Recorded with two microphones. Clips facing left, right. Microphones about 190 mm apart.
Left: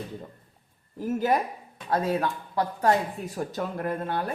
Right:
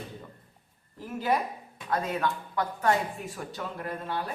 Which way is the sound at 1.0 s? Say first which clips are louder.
Left 4 dB; 45° left (ahead or behind).